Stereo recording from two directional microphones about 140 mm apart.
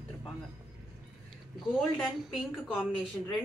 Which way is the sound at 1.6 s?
Centre (ahead or behind).